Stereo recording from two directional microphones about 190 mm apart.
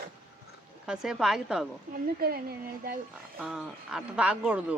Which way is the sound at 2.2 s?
55° right (ahead or behind).